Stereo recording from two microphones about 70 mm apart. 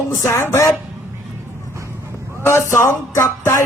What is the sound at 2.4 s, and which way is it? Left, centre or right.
Speech, left.